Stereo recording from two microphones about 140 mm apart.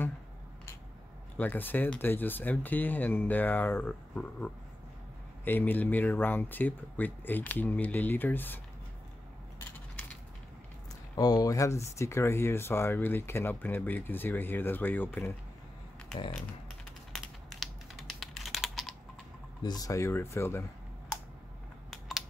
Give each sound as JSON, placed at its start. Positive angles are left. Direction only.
{"t": 1.4, "sound": "speech", "side_deg": 15}
{"t": 9.7, "sound": "a sound", "side_deg": 15}
{"t": 11.1, "sound": "speech", "side_deg": 30}
{"t": 17.1, "sound": "typing", "side_deg": 0}
{"t": 19.6, "sound": "speech", "side_deg": 30}